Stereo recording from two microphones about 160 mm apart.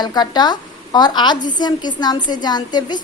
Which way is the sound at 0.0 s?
25° left (ahead or behind).